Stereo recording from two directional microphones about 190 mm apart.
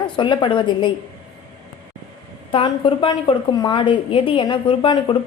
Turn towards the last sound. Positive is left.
turn(degrees=25)  # may be behind; listen again after turning